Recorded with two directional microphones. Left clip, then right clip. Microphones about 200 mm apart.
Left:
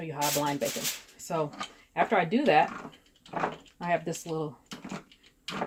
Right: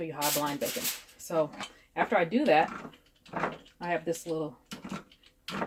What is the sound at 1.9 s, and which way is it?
Speech, 40° left (ahead or behind).